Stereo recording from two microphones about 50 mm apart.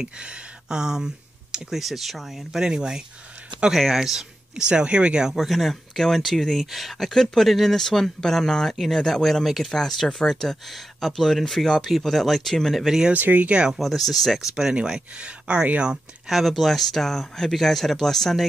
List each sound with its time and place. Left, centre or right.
0.0 s speech: centre
2.6 s speech: centre
5.3 s speech: centre
13.1 s speech: right
13.7 s speech: centre
14.5 s speech: centre
16.3 s speech: centre